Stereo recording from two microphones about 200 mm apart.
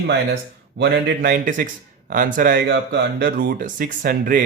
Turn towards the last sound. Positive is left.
turn(degrees=-45)  # may be behind; listen again after turning